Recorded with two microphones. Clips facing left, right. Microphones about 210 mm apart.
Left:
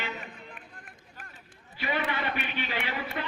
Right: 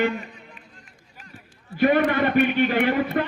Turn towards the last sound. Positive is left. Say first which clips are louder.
# right 13 dB
turn(degrees=-55)  # may be behind; listen again after turning